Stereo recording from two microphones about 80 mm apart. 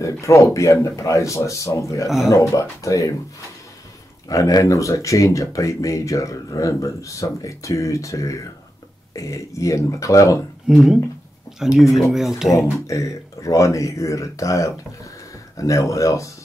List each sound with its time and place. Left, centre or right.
0.0 s speech: left
4.3 s speech: left
10.7 s speech: centre
12.4 s speech: left